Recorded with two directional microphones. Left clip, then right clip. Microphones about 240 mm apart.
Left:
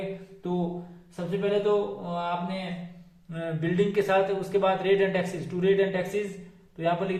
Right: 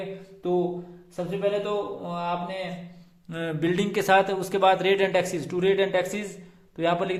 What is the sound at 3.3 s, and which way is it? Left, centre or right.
Mantra, right.